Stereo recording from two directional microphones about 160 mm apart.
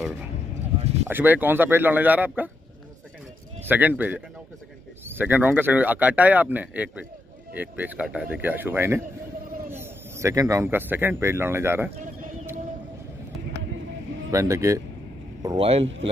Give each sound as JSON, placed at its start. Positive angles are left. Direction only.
{"t": 0.7, "sound": "a sound", "side_deg": -40}
{"t": 1.0, "sound": "speech", "side_deg": -10}
{"t": 3.6, "sound": "speech", "side_deg": -10}
{"t": 12.0, "sound": "bird", "side_deg": -55}
{"t": 14.3, "sound": "speech", "side_deg": -20}
{"t": 15.5, "sound": "a man's voice", "side_deg": -35}